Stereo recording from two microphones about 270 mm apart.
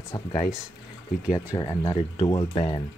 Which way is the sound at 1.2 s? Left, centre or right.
Centre.